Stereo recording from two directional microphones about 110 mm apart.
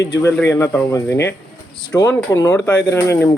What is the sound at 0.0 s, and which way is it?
Speech, 25° left (ahead or behind).